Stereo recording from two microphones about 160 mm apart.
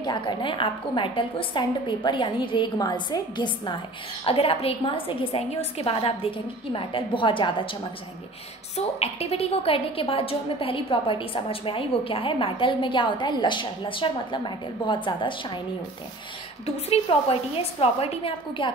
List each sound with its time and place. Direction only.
0.0 s a woman's voice: 30° left (ahead or behind)
8.7 s a woman's voice: 40° left (ahead or behind)
16.6 s a woman's voice: 40° left (ahead or behind)